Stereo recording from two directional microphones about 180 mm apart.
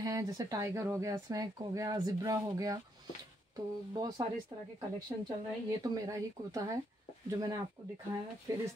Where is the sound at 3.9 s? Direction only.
20° right (ahead or behind).